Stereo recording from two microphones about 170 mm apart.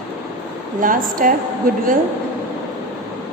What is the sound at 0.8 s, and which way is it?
Speech, 50° right (ahead or behind).